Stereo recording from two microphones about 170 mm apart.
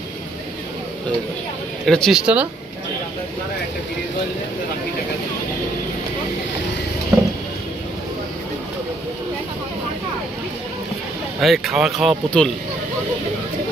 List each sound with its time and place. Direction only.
1.9 s speech: 5° left (ahead or behind)
7.1 s a sound: 20° right (ahead or behind)
11.4 s speech: centre (ahead or behind)